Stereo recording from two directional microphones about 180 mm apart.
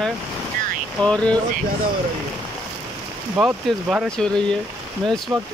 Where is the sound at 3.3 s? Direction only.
5° right (ahead or behind).